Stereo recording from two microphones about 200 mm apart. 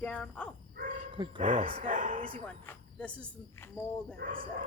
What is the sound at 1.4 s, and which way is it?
Speech, 40° right (ahead or behind).